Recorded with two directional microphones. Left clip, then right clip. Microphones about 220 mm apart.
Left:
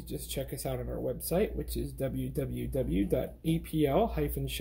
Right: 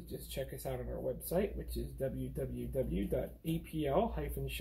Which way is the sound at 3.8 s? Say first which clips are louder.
Left 5 dB; 45° left (ahead or behind).